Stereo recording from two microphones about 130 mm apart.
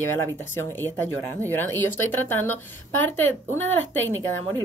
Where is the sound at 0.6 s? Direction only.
15° left (ahead or behind).